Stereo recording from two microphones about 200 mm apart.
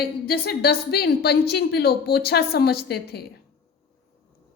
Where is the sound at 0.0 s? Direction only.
50° left (ahead or behind).